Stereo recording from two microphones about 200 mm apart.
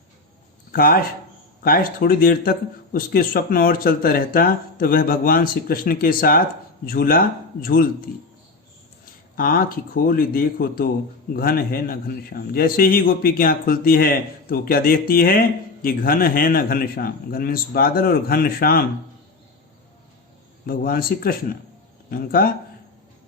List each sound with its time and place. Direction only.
0.7 s a man's voice: 45° left (ahead or behind)
9.3 s a man's voice: 45° left (ahead or behind)
20.7 s a man's voice: 45° left (ahead or behind)